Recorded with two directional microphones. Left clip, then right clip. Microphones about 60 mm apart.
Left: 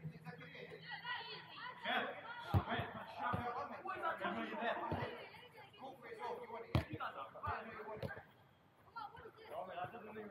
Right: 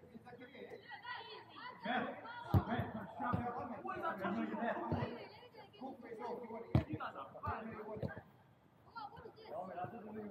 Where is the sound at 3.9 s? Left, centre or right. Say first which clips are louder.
Even; right.